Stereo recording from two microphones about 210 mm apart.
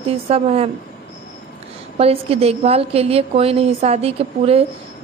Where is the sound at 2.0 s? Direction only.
30° right (ahead or behind).